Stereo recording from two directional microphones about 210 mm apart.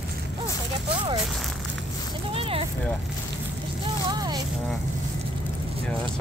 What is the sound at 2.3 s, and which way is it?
Speech, 25° right (ahead or behind).